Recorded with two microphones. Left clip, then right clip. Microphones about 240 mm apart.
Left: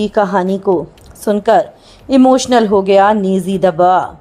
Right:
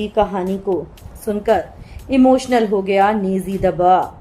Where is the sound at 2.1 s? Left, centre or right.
Left.